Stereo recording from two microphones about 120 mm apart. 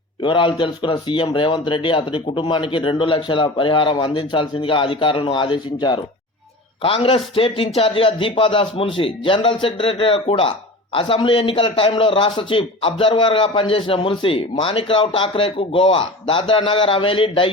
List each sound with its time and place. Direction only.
0.2 s speech: 45° left (ahead or behind)